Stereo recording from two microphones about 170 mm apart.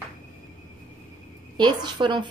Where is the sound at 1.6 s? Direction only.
25° right (ahead or behind).